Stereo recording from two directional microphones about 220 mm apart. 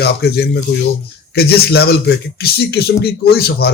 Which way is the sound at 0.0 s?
45° left (ahead or behind).